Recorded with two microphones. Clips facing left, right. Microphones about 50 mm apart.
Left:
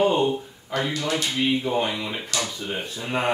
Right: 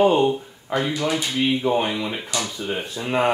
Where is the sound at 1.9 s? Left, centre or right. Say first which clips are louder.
Right 3 dB; centre.